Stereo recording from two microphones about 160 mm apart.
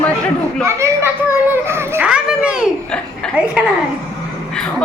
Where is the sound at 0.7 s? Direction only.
15° right (ahead or behind).